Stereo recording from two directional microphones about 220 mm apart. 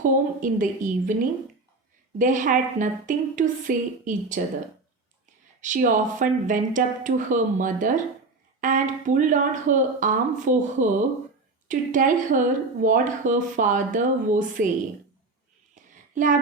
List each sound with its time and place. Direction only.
0.0 s speech: 35° right (ahead or behind)
2.1 s speech: 35° right (ahead or behind)
5.5 s speech: 35° right (ahead or behind)
15.7 s a sound: 35° right (ahead or behind)